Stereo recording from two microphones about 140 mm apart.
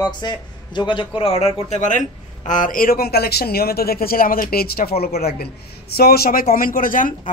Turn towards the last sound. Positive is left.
turn(degrees=75)  # may be behind; listen again after turning